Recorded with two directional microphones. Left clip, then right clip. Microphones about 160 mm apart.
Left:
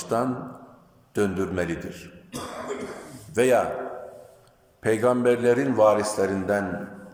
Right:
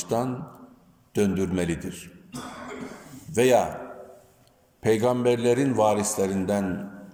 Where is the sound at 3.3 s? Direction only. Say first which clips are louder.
Even; 25° right (ahead or behind).